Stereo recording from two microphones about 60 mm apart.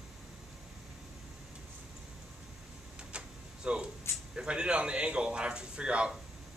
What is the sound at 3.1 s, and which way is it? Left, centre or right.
Door, centre.